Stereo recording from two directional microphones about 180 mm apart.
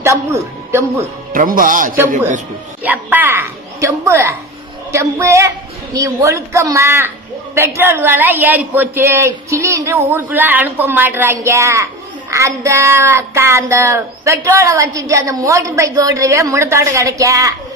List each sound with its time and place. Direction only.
1.3 s speech: 50° right (ahead or behind)
2.8 s a sound: 10° right (ahead or behind)
4.9 s child singing: 15° right (ahead or behind)